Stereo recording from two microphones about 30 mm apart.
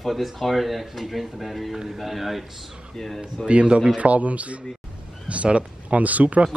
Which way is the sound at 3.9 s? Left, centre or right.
Right.